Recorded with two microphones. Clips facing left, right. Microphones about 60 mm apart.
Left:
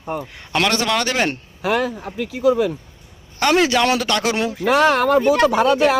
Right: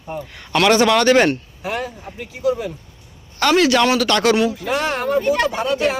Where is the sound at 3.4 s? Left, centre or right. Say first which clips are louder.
Right 1 dB; centre.